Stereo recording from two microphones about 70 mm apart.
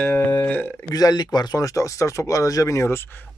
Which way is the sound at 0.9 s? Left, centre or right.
Left.